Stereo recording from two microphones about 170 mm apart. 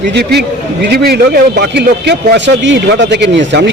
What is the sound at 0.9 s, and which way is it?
Speech, 65° right (ahead or behind).